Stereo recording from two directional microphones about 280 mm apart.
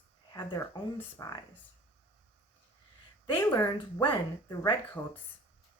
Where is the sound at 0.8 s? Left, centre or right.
Centre.